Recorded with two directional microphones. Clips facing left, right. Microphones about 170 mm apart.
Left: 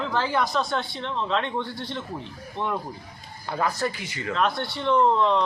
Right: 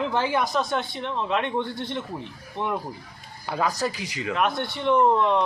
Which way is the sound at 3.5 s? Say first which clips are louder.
Right 1 dB; 15° right (ahead or behind).